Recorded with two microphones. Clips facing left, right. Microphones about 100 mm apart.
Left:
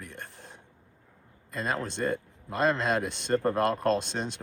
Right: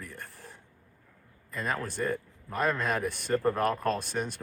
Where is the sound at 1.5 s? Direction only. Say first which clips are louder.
Left 1 dB; 20° left (ahead or behind).